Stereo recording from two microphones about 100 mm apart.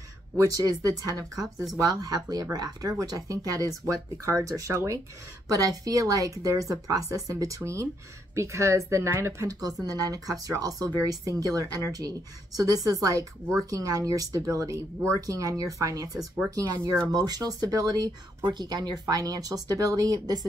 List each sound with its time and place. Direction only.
0.4 s speech: 35° right (ahead or behind)